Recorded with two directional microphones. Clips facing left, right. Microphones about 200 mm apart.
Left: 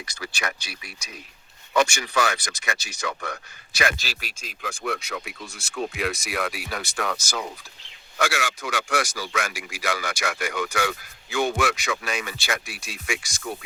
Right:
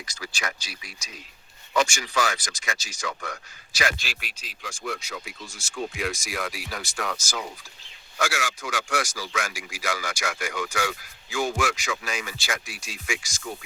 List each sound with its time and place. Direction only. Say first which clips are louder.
0.0 s speech: left 2 dB; 60° left (ahead or behind)
3.9 s speech: left 2 dB; 40° left (ahead or behind); by 13.7 s 60° left (ahead or behind)